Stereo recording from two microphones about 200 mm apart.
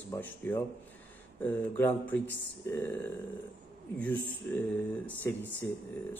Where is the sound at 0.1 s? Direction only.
10° left (ahead or behind).